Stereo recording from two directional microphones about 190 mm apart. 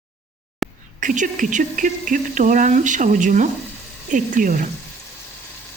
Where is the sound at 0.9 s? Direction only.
45° right (ahead or behind).